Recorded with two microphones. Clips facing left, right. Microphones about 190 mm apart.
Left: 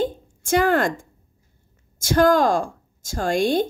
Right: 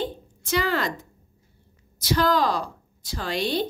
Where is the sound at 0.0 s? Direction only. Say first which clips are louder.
Left 6 dB; 50° left (ahead or behind).